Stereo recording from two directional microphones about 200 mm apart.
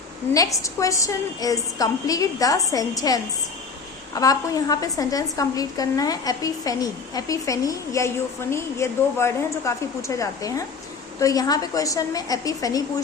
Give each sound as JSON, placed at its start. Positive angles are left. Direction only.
{"t": 0.3, "sound": "a woman's voice", "side_deg": 15}